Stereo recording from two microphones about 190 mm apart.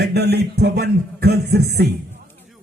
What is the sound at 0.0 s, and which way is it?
A man's voice, 60° right (ahead or behind).